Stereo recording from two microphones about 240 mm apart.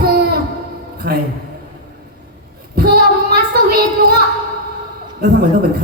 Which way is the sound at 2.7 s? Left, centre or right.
Right.